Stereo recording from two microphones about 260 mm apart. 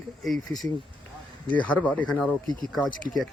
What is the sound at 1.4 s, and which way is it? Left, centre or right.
Speech, centre.